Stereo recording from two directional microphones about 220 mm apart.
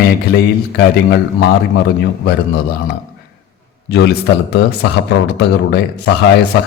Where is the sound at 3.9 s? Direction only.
50° left (ahead or behind).